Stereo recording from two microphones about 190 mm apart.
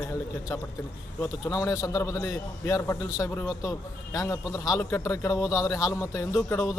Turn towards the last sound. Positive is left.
turn(degrees=15)  # may be behind; listen again after turning